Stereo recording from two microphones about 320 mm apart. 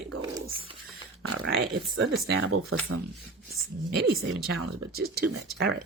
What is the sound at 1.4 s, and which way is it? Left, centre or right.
Speech, right.